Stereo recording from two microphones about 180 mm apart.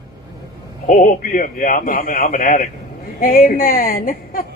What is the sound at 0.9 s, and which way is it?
Speech, 45° left (ahead or behind).